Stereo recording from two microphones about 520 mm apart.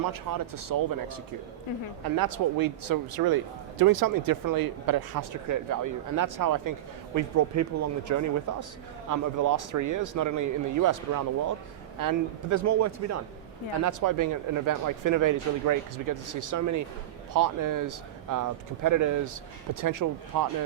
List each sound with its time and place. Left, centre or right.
0.0 s a man's voice: right